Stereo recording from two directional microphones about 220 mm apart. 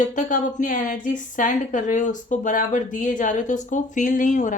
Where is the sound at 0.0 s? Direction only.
35° left (ahead or behind).